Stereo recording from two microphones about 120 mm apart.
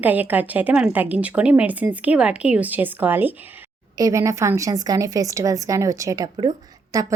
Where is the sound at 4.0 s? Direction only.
25° right (ahead or behind).